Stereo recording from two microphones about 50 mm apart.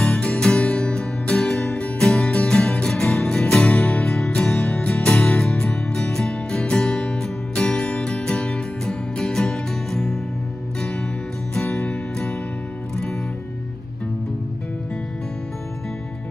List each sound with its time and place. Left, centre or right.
0.0 s music: left
5.9 s music: centre
7.5 s music: centre
11.7 s music: centre